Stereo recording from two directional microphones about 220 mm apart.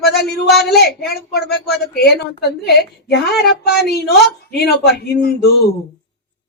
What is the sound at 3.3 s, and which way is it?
Speech, 45° left (ahead or behind).